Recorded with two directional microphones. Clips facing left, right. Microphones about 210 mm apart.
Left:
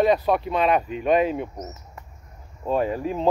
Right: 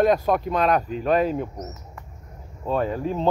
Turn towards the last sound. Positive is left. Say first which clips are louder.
# even
turn(degrees=5)  # may be behind; listen again after turning